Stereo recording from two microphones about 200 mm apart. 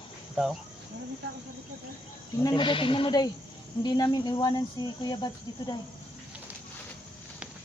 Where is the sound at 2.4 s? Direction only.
25° left (ahead or behind).